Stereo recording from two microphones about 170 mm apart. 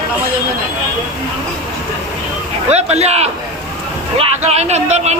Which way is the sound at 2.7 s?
40° right (ahead or behind).